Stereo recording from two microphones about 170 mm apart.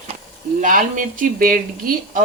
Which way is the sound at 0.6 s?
50° right (ahead or behind).